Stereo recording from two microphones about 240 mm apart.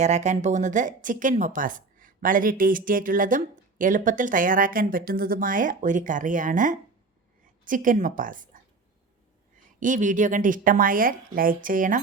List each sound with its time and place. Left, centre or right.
0.0 s a woman's voice: right
9.8 s a woman's voice: right